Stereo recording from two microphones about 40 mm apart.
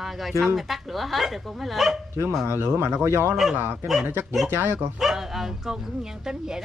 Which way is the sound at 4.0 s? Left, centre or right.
Right.